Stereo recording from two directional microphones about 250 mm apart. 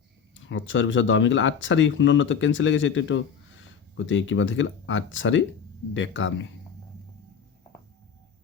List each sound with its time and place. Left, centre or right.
0.3 s speech: left